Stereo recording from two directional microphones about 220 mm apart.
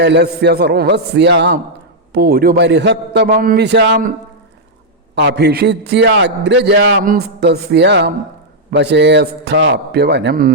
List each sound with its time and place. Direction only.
0.0 s a man's voice: 50° right (ahead or behind)
5.1 s a man's voice: 50° right (ahead or behind)